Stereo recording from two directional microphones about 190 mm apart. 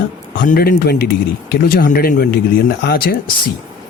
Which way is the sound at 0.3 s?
45° left (ahead or behind).